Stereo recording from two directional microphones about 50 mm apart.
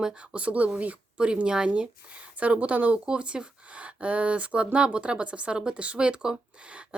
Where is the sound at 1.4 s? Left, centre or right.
Centre.